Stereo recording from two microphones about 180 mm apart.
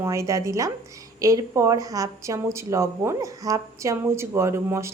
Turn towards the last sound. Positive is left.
turn(degrees=-15)  # may be behind; listen again after turning